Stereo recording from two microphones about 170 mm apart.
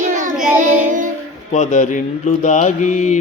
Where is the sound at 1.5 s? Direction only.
45° left (ahead or behind).